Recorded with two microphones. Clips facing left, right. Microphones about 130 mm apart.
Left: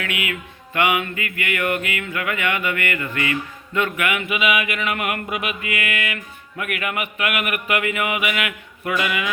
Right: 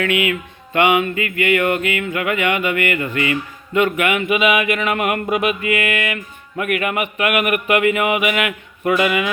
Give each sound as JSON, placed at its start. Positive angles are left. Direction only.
{"t": 0.0, "sound": "music", "side_deg": -30}
{"t": 4.7, "sound": "mantra", "side_deg": -35}
{"t": 6.6, "sound": "music", "side_deg": -30}